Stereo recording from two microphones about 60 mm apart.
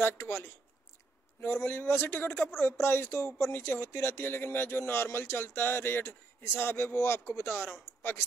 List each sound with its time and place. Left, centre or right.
0.0 s a man's voice: left